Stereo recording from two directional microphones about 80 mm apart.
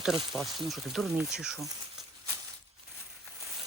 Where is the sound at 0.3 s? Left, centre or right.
Centre.